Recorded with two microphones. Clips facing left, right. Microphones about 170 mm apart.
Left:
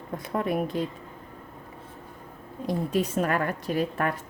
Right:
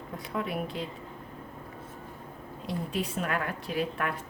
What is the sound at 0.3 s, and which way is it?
Speech, 45° left (ahead or behind).